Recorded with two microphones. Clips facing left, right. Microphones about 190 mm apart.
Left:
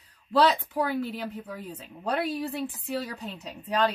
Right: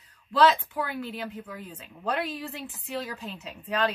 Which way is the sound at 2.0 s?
40° left (ahead or behind).